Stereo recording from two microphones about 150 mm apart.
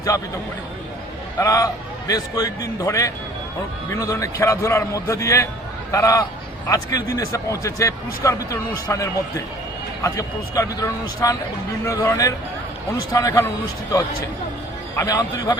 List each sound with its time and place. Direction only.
1.4 s speech: 20° left (ahead or behind)
14.9 s speech: 25° left (ahead or behind)